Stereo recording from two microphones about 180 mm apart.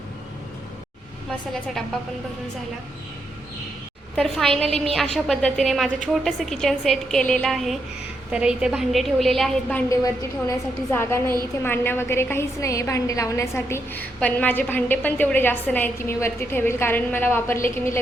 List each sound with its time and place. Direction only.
4.1 s a woman's voice: centre (ahead or behind)
9.9 s a woman's voice: 15° left (ahead or behind)